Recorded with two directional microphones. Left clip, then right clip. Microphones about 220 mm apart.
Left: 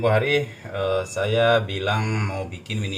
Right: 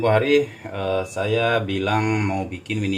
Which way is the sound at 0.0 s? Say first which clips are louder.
Right 3 dB; 40° right (ahead or behind).